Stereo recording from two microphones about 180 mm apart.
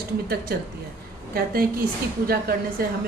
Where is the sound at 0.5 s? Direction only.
60° right (ahead or behind).